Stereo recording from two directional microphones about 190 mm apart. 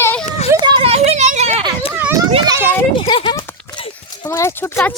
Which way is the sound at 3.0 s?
25° left (ahead or behind).